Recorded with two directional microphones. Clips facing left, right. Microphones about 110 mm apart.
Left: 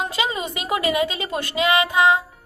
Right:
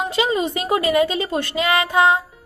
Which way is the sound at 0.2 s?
35° right (ahead or behind).